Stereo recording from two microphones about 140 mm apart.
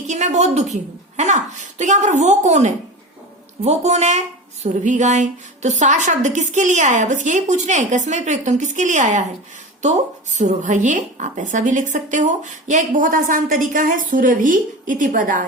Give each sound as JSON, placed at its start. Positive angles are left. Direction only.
{"t": 0.1, "sound": "a woman's voice", "side_deg": -55}